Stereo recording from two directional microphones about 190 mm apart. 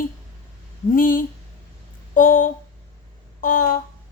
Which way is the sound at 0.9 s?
45° left (ahead or behind).